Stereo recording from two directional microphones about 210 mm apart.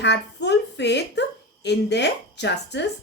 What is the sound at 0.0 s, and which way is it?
A woman's voice, 55° left (ahead or behind).